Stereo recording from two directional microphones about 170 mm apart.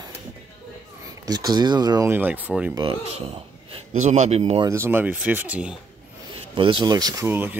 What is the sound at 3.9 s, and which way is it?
Speech, 45° right (ahead or behind).